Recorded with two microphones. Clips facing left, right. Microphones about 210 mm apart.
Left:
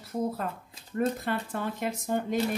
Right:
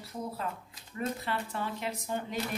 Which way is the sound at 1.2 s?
50° left (ahead or behind).